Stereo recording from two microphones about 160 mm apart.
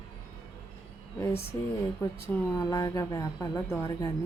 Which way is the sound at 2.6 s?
25° left (ahead or behind).